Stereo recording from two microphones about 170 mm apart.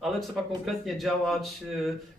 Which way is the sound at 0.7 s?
Centre (ahead or behind).